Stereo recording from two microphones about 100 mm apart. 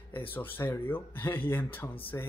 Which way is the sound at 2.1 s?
30° left (ahead or behind).